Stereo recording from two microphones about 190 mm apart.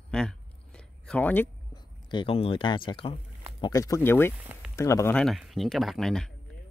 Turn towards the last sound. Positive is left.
turn(degrees=0)  # may be behind; listen again after turning